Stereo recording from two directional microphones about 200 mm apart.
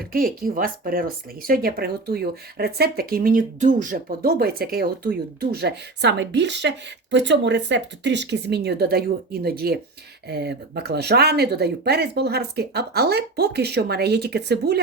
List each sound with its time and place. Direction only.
0.0 s speech: 45° right (ahead or behind)